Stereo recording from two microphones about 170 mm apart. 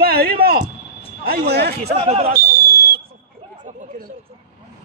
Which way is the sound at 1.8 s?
35° right (ahead or behind).